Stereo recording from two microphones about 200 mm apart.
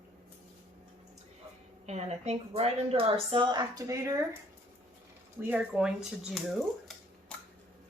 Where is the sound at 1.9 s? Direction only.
35° right (ahead or behind); by 4.2 s 15° right (ahead or behind).